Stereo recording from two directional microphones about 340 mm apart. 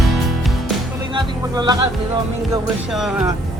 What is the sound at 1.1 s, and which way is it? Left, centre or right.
Music, centre.